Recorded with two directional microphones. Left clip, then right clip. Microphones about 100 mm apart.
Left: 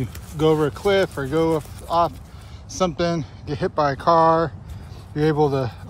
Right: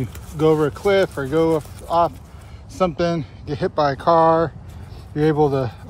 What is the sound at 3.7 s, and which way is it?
Speech, 25° right (ahead or behind).